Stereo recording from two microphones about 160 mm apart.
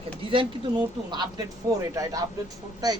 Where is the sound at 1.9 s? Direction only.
20° right (ahead or behind).